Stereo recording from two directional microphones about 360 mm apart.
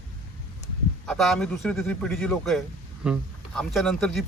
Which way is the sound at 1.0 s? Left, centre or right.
Centre.